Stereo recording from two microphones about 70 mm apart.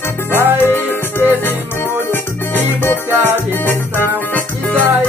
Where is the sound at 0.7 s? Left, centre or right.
Left.